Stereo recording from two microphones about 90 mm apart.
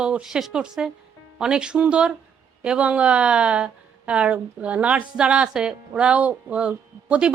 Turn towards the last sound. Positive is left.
turn(degrees=-15)  # may be behind; listen again after turning